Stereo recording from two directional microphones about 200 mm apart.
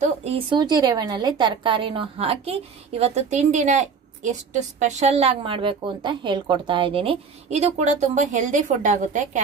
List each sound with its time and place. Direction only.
0.2 s a woman's voice: 25° right (ahead or behind)